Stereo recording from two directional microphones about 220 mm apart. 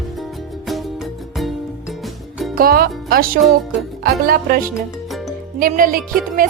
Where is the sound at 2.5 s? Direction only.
45° right (ahead or behind).